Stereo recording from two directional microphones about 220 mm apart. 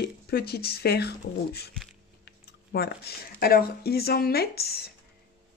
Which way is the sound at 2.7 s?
45° left (ahead or behind).